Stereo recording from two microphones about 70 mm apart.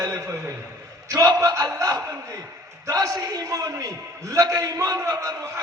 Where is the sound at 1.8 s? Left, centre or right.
Right.